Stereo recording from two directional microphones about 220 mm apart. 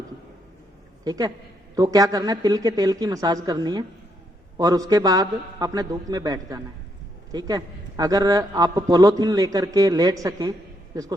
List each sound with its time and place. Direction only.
1.0 s a man's voice: 15° right (ahead or behind)